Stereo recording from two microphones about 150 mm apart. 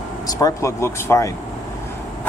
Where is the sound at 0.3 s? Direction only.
25° left (ahead or behind).